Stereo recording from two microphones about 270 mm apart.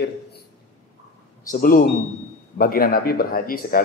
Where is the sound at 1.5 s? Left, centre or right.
Left.